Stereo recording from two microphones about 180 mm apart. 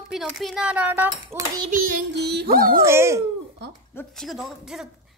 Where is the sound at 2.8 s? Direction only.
15° right (ahead or behind).